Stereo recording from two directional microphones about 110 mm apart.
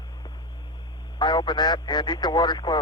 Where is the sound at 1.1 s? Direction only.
45° left (ahead or behind).